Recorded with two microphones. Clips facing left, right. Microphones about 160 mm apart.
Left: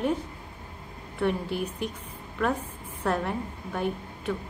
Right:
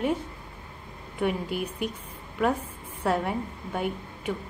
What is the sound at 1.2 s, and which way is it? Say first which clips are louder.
Speech: even; 10° right (ahead or behind).